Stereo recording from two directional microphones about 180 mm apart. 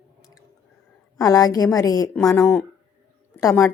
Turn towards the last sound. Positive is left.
turn(degrees=15)  # may be behind; listen again after turning